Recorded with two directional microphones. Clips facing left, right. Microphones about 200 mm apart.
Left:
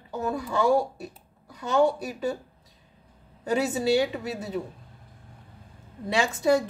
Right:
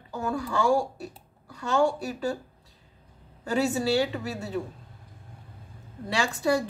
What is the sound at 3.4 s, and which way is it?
Speech, 20° left (ahead or behind).